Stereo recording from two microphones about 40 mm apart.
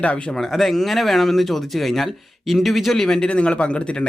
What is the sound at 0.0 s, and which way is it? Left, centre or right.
Speech, left.